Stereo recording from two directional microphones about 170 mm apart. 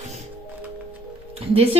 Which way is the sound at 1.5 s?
35° right (ahead or behind).